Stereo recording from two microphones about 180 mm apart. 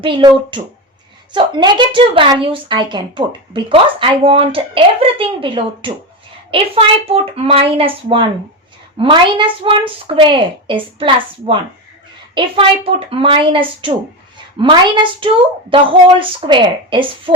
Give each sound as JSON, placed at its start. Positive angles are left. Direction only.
{"t": 0.0, "sound": "a woman's voice", "side_deg": -25}